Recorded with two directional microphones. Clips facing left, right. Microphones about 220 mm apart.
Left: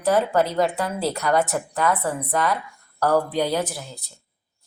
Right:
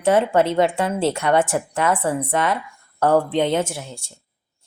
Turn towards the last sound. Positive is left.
turn(degrees=-25)  # may be behind; listen again after turning